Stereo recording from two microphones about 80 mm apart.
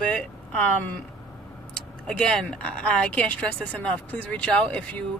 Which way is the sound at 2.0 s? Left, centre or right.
Centre.